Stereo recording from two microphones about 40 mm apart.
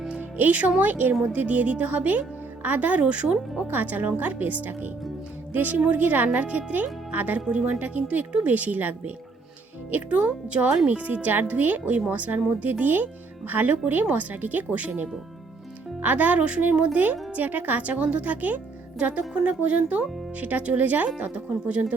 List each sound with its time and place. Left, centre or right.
0.2 s music: right
0.8 s speech: right
3.7 s speech: right
7.4 s speech: right
7.8 s speech: right
10.1 s speech: right
18.9 s speech: right